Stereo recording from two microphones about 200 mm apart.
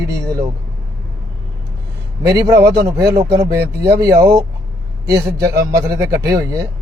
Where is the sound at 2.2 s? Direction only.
15° right (ahead or behind).